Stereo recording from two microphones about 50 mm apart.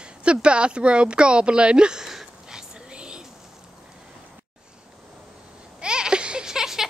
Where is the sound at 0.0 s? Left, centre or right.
Right.